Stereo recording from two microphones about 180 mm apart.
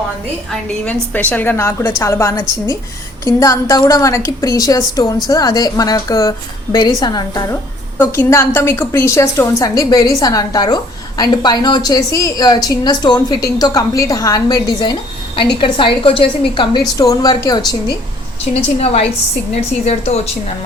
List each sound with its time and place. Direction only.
1.1 s a woman's voice: 10° left (ahead or behind)
18.5 s a woman's voice: 35° left (ahead or behind)